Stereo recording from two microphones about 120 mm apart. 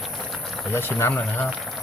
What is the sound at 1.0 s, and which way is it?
Speech, 20° left (ahead or behind).